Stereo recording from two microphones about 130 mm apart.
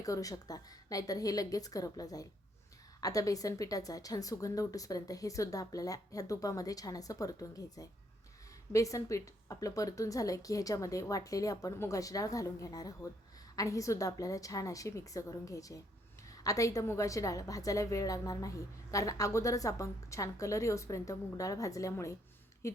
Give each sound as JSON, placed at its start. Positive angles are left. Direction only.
{"t": 0.0, "sound": "a woman's voice", "side_deg": 25}